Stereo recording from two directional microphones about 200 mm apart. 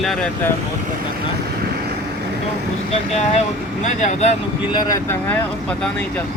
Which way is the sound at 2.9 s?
30° left (ahead or behind).